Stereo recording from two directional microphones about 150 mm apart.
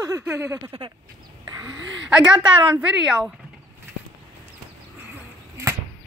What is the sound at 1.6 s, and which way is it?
Speech, 10° right (ahead or behind).